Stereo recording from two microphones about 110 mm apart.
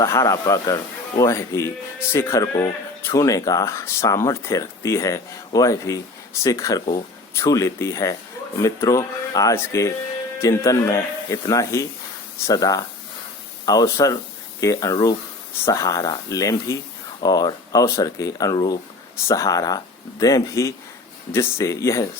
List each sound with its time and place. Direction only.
0.0 s speech: 30° left (ahead or behind)